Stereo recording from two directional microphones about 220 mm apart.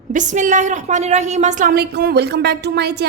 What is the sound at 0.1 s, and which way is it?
A woman's voice, 35° right (ahead or behind).